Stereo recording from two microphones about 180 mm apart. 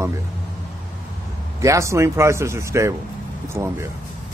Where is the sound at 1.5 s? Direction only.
15° right (ahead or behind).